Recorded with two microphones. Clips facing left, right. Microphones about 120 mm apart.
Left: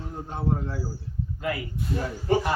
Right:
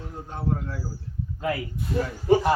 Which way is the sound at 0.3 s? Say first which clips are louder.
Left 1 dB; 20° left (ahead or behind).